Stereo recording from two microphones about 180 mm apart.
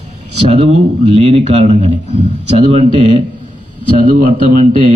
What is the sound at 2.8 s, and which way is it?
Speech, 30° left (ahead or behind).